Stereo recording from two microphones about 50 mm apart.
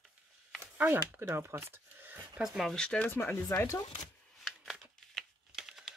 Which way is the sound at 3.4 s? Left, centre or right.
Left.